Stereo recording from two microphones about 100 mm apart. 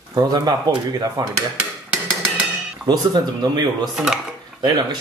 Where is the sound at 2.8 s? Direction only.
45° right (ahead or behind).